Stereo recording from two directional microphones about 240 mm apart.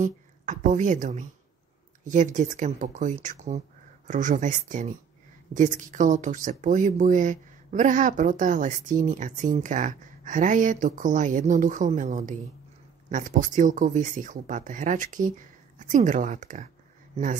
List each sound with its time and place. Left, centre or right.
0.0 s a woman's voice: right